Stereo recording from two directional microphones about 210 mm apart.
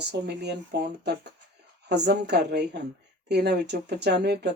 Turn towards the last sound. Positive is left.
turn(degrees=-50)  # may be behind; listen again after turning